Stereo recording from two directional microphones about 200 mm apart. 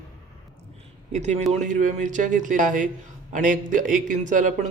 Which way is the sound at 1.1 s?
35° right (ahead or behind).